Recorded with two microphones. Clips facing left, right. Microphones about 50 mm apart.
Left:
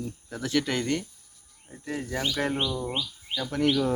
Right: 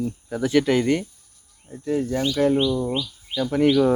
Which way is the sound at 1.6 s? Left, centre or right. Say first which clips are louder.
Right 10 dB; centre.